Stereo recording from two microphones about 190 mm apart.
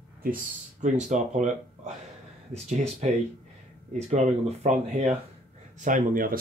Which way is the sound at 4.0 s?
35° right (ahead or behind).